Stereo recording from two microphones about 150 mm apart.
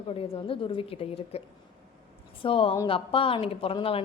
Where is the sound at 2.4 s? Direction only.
35° left (ahead or behind).